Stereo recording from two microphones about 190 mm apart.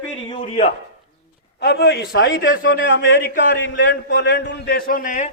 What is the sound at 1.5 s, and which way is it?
A man's voice, 60° left (ahead or behind).